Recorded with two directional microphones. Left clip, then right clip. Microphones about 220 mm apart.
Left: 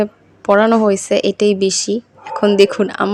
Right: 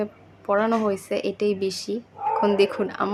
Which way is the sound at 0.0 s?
35° left (ahead or behind).